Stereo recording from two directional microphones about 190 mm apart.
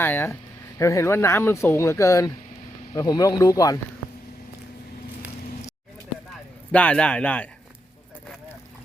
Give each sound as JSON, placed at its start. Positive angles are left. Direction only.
{"t": 0.0, "sound": "speech", "side_deg": 10}
{"t": 6.7, "sound": "speech", "side_deg": 5}